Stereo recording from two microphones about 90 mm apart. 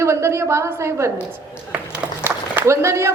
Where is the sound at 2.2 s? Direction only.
30° right (ahead or behind).